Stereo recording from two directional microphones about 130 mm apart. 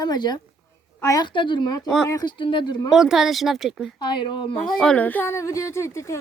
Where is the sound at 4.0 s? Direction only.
35° left (ahead or behind).